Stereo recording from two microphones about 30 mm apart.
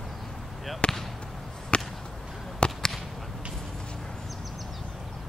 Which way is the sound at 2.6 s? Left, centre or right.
Left.